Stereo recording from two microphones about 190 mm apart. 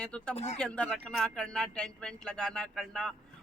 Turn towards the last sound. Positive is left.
turn(degrees=5)  # may be behind; listen again after turning